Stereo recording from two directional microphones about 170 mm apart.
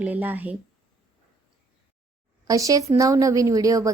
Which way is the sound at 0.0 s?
10° right (ahead or behind).